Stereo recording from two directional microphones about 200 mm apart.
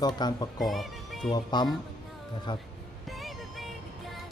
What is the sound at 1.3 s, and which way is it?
Speech, 20° left (ahead or behind).